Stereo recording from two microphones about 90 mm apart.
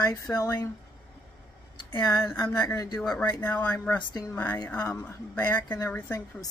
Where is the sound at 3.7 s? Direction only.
15° left (ahead or behind).